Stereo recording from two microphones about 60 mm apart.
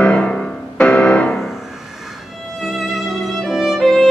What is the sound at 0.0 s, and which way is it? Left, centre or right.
Music, centre.